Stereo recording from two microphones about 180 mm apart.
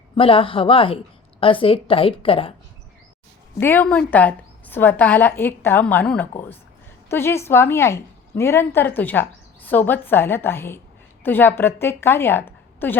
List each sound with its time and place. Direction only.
0.2 s a woman's voice: 30° left (ahead or behind)
3.6 s a woman's voice: 10° left (ahead or behind)